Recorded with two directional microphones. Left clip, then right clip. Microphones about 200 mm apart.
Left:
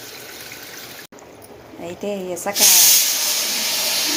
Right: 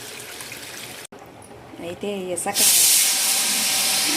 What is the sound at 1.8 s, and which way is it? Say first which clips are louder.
Speech: left 2 dB; centre (ahead or behind).